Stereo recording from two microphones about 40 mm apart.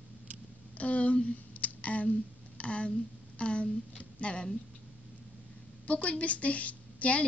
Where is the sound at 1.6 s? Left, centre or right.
Left.